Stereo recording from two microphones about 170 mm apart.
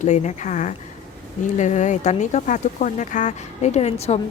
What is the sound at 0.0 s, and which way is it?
A woman's voice, 45° left (ahead or behind).